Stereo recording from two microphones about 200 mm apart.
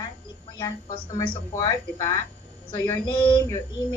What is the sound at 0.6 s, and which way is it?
Speech, 20° left (ahead or behind).